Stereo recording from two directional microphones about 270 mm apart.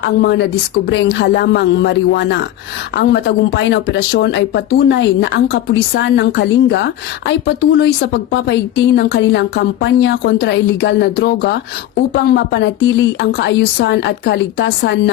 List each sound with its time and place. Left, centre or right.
0.2 s a woman's voice: left